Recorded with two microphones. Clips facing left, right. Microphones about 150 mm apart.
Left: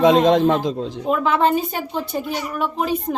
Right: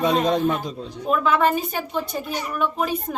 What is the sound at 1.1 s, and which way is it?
A woman's voice, 25° left (ahead or behind).